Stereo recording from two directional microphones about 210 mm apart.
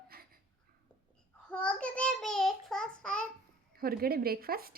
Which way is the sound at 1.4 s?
5° left (ahead or behind).